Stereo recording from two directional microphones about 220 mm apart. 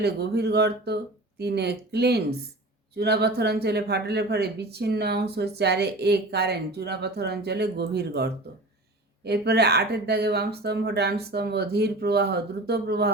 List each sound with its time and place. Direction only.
0.0 s speech: 45° right (ahead or behind)